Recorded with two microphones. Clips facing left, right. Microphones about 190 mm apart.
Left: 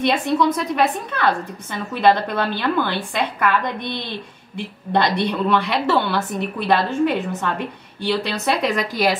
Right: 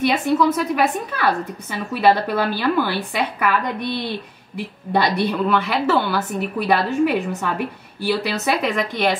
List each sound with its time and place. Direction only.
0.0 s a woman's voice: 5° right (ahead or behind)